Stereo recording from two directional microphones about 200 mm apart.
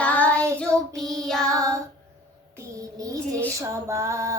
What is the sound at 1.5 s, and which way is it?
Female singing, 15° right (ahead or behind).